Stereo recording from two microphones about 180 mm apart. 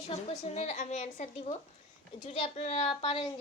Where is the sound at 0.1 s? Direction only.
35° left (ahead or behind).